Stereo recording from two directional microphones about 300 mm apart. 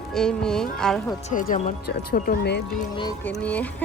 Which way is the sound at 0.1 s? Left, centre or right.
Centre.